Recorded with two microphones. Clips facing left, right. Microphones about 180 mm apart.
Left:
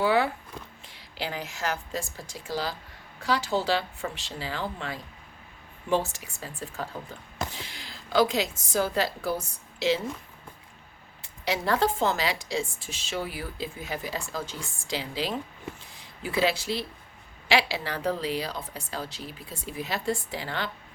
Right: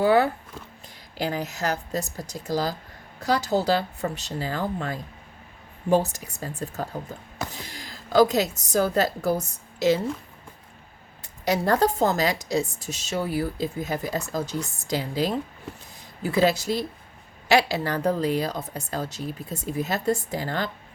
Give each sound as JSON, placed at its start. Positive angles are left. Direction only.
{"t": 0.0, "sound": "a sound", "side_deg": -45}
{"t": 1.1, "sound": "a woman's voice", "side_deg": -45}
{"t": 11.2, "sound": "a woman's voice", "side_deg": -45}